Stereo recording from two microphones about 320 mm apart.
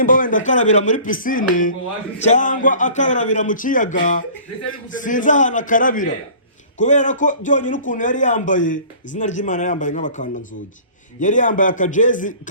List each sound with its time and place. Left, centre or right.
0.0 s a man's voice: left
4.9 s a man's voice: left